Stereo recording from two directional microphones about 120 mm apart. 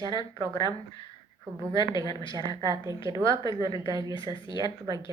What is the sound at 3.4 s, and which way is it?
A woman's voice, 40° left (ahead or behind).